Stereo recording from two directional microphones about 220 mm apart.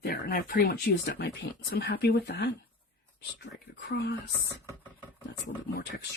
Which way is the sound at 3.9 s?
50° left (ahead or behind).